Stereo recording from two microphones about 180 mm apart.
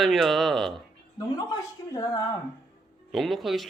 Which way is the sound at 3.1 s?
Centre (ahead or behind).